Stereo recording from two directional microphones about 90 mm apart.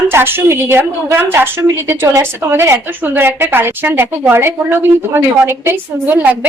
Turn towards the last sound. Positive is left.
turn(degrees=-15)  # may be behind; listen again after turning